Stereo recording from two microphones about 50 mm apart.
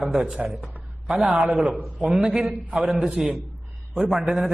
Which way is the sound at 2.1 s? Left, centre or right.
Centre.